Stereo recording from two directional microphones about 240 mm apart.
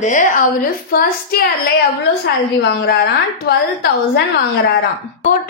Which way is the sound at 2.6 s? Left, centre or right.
Left.